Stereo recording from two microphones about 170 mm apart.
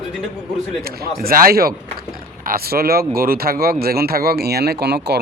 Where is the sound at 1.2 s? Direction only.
60° right (ahead or behind); by 5.1 s 75° right (ahead or behind).